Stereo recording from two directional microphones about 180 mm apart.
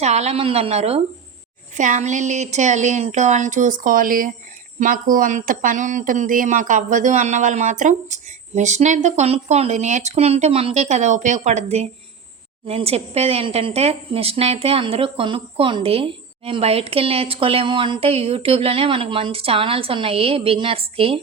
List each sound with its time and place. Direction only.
0.0 s a woman's voice: 40° right (ahead or behind)